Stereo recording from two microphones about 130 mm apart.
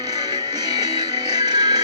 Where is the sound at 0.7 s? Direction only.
30° right (ahead or behind).